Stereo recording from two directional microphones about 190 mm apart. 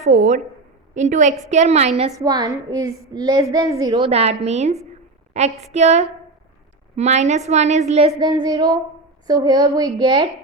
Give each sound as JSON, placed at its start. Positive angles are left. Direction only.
{"t": 0.0, "sound": "a woman's voice", "side_deg": -35}
{"t": 2.1, "sound": "a woman's voice", "side_deg": -20}
{"t": 4.0, "sound": "a woman's voice", "side_deg": -35}
{"t": 8.2, "sound": "a woman's voice", "side_deg": -25}